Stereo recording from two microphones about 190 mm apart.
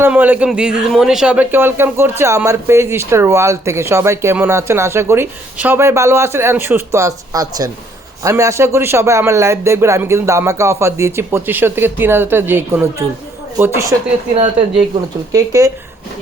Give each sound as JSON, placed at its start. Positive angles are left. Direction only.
{"t": 0.0, "sound": "a man's voice", "side_deg": -10}
{"t": 15.3, "sound": "a man's voice", "side_deg": -15}